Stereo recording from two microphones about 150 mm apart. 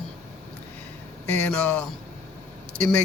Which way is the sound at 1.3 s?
10° left (ahead or behind).